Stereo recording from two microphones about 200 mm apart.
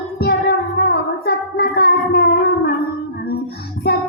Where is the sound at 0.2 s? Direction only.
55° left (ahead or behind).